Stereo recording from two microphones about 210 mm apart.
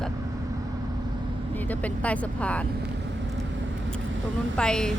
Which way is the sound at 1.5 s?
5° left (ahead or behind).